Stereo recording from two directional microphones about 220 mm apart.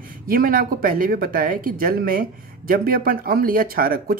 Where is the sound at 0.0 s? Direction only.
40° right (ahead or behind).